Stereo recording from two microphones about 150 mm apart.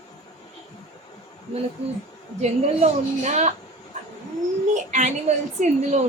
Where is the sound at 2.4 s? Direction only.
50° right (ahead or behind).